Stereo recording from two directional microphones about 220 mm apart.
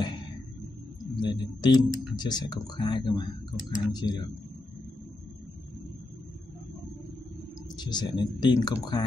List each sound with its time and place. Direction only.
1.2 s speech: 20° left (ahead or behind)
7.7 s speech: 20° left (ahead or behind)